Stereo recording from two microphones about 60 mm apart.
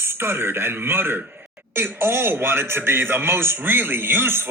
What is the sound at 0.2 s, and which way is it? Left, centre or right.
Speech, right.